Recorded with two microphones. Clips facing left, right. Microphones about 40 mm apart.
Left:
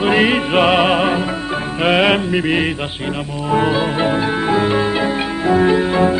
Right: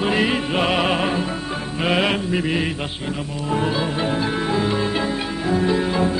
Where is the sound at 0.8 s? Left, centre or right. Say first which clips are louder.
Left 5 dB; centre.